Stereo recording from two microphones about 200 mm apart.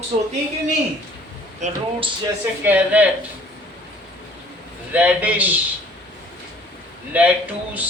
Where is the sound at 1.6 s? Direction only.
35° right (ahead or behind).